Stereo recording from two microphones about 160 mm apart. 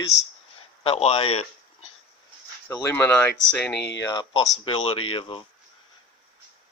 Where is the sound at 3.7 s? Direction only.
90° left.